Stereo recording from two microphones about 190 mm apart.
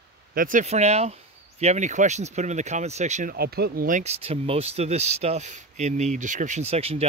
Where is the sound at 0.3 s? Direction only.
45° right (ahead or behind).